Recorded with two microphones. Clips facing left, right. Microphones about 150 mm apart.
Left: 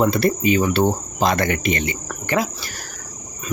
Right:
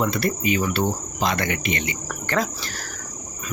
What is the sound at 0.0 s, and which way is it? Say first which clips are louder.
Cricket: left 5 dB; 30° left (ahead or behind).